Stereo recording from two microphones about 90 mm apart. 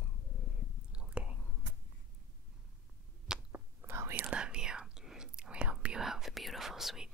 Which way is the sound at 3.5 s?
25° right (ahead or behind).